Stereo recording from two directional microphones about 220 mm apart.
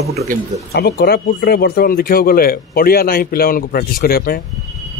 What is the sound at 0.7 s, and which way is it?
A man's voice, 45° left (ahead or behind).